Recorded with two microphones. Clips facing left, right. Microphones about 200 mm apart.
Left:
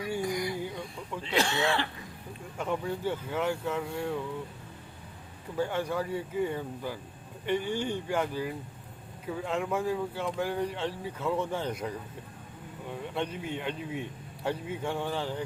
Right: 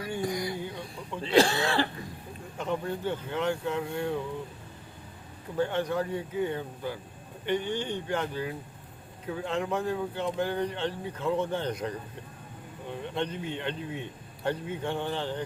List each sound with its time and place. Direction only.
0.3 s a sound: 35° right (ahead or behind)
1.2 s speech: 35° right (ahead or behind)
2.6 s a man's voice: 10° left (ahead or behind)
5.5 s a man's voice: 10° left (ahead or behind)
13.1 s a man's voice: 5° left (ahead or behind)